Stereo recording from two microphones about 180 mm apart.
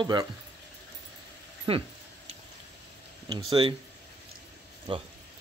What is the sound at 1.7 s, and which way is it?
Speech, 30° right (ahead or behind).